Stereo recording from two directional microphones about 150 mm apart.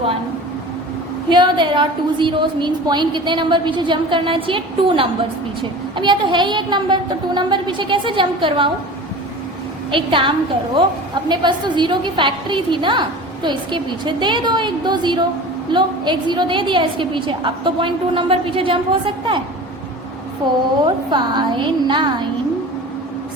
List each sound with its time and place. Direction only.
1.3 s a woman's voice: 30° right (ahead or behind)
9.9 s a woman's voice: 35° right (ahead or behind)
20.8 s a woman's voice: 30° right (ahead or behind)